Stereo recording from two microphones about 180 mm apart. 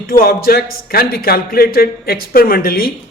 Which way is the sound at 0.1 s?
55° left (ahead or behind).